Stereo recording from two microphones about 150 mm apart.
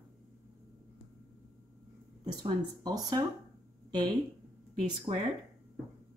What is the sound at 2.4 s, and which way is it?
Speech, 25° right (ahead or behind).